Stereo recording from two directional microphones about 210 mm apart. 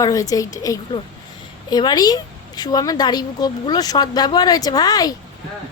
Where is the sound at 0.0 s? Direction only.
15° left (ahead or behind).